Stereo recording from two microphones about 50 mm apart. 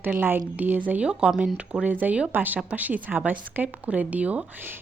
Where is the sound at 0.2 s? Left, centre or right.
Right.